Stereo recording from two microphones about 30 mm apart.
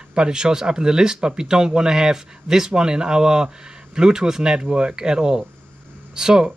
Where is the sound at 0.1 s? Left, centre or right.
Right.